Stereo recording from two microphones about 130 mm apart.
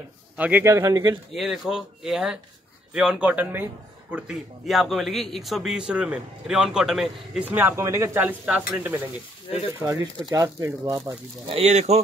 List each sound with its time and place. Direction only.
0.4 s speech: 15° right (ahead or behind)
1.3 s speech: 5° right (ahead or behind)
10.3 s speech: 25° right (ahead or behind)
11.4 s speech: 50° right (ahead or behind)